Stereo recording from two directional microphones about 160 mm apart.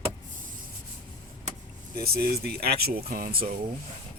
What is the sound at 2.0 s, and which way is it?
Speech, 75° right (ahead or behind).